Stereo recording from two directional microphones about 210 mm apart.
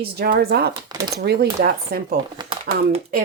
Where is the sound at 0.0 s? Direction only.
45° right (ahead or behind).